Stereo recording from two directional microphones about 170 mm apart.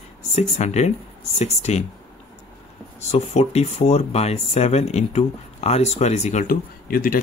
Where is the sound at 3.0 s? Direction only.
40° left (ahead or behind); by 7.1 s 55° left (ahead or behind).